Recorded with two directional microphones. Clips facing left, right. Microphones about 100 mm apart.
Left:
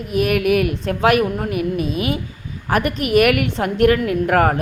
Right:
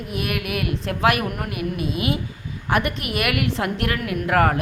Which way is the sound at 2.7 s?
40° left (ahead or behind).